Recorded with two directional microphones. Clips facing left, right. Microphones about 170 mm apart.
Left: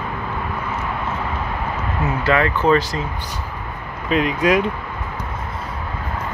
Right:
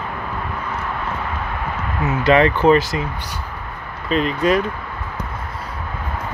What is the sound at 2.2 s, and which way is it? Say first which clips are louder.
Speech: right 4 dB; 15° right (ahead or behind).